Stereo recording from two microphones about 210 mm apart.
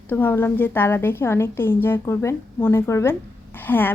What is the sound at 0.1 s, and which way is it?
A woman's voice, 10° left (ahead or behind).